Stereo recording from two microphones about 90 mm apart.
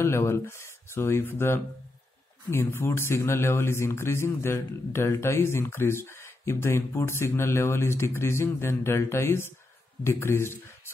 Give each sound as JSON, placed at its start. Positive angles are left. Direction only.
{"t": 0.0, "sound": "speech", "side_deg": 30}